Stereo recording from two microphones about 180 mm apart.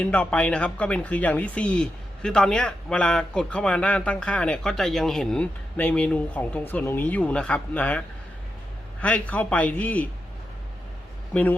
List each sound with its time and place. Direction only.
0.0 s a man's voice: 5° left (ahead or behind)
11.3 s a man's voice: 5° left (ahead or behind)